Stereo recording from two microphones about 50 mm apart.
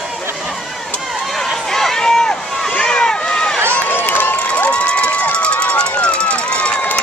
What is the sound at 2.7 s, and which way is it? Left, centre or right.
Boat, centre.